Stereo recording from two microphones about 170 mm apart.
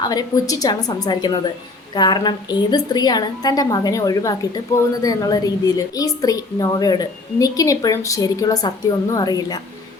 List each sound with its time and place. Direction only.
0.0 s a woman's voice: 20° left (ahead or behind)